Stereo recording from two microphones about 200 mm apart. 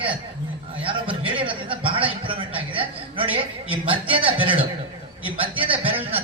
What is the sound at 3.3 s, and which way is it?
Speech, 25° right (ahead or behind).